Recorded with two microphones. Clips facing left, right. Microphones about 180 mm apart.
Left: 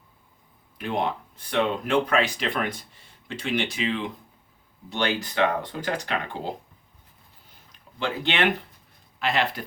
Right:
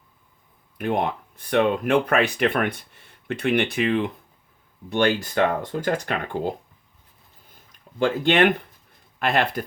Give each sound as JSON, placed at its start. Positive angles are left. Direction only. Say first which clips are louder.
{"t": 0.8, "sound": "speech", "louder": "right 3 dB", "side_deg": -55}
{"t": 7.5, "sound": "a sound", "louder": "right 4 dB", "side_deg": -50}
{"t": 9.1, "sound": "speech", "louder": "right 3 dB", "side_deg": -50}